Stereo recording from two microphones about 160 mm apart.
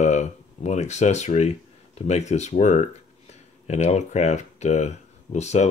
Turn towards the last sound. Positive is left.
turn(degrees=45)  # may be behind; listen again after turning